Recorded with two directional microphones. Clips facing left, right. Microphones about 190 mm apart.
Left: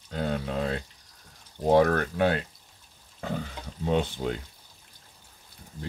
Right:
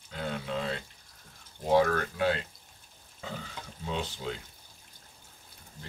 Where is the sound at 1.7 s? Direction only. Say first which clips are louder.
Left 4 dB; 50° left (ahead or behind).